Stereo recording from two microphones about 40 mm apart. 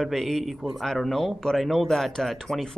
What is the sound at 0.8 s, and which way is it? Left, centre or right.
A man's voice, centre.